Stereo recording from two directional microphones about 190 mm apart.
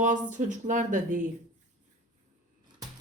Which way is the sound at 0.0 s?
40° right (ahead or behind).